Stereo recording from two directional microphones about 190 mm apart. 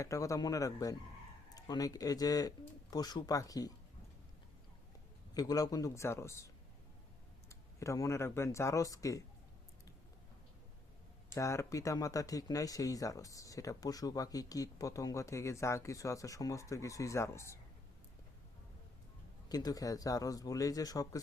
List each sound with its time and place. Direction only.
0.0 s speech: 15° left (ahead or behind)
5.3 s speech: 20° left (ahead or behind)
7.8 s speech: 15° left (ahead or behind)
11.3 s speech: 15° left (ahead or behind)
19.5 s speech: 20° left (ahead or behind)